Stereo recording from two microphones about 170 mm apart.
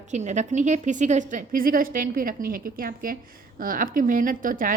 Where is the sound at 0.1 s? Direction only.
45° right (ahead or behind).